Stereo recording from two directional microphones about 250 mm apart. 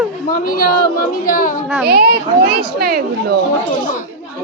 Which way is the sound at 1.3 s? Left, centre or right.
Left.